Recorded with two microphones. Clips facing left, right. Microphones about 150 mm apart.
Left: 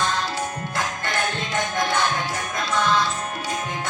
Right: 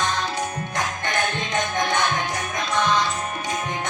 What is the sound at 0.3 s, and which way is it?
Music, 20° right (ahead or behind).